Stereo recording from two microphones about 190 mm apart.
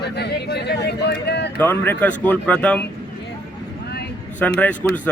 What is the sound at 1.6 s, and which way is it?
A man's voice, 10° left (ahead or behind).